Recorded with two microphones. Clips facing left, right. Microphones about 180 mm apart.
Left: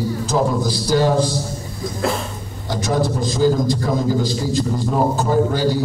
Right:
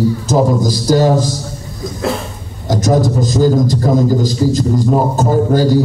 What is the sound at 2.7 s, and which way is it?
A man's voice, 40° right (ahead or behind).